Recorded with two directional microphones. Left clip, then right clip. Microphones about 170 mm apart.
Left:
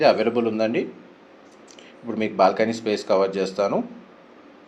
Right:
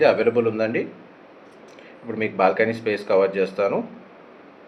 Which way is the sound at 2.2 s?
40° left (ahead or behind).